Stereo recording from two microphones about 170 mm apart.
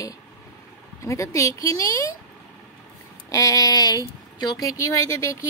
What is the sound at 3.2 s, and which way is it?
Speech, 20° left (ahead or behind).